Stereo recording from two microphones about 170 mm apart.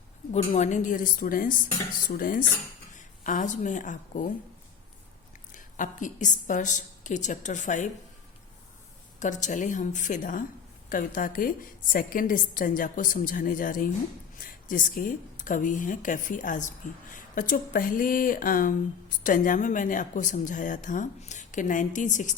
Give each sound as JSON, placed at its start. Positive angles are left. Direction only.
{"t": 0.3, "sound": "speech", "side_deg": 45}
{"t": 2.0, "sound": "dishes", "side_deg": 55}
{"t": 3.2, "sound": "speech", "side_deg": 50}
{"t": 5.5, "sound": "speech", "side_deg": 50}
{"t": 9.2, "sound": "speech", "side_deg": 45}